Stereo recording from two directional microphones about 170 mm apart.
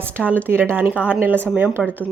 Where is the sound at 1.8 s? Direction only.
10° left (ahead or behind).